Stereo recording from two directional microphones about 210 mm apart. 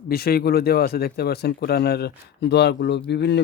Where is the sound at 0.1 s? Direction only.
45° left (ahead or behind).